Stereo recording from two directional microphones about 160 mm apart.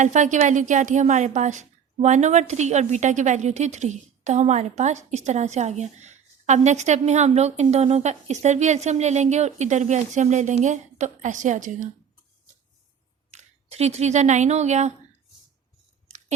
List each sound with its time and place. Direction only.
0.0 s speech: 50° right (ahead or behind)
13.3 s speech: 40° right (ahead or behind)